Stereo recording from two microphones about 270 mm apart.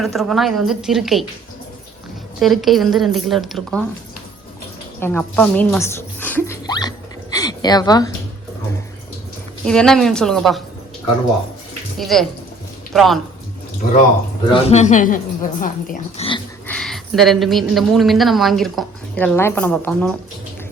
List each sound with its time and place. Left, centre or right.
0.0 s a woman's voice: centre
2.4 s a woman's voice: centre
4.9 s a sound: centre
9.6 s a woman's voice: centre
11.9 s a woman's voice: centre
14.5 s speech: left
16.6 s speech: centre